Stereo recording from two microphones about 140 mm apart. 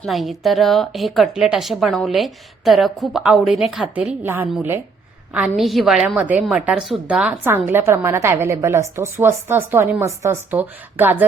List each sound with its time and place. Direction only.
0.0 s a woman's voice: centre (ahead or behind)
5.5 s a woman's voice: centre (ahead or behind)